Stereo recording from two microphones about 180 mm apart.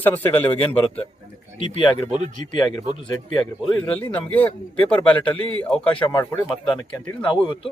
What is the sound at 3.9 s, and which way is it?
Speech, 10° left (ahead or behind).